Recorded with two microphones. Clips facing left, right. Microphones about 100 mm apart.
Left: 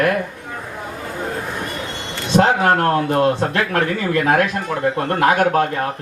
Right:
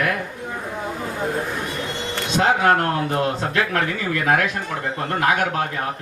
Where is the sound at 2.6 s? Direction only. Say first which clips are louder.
Left 2 dB; 40° left (ahead or behind).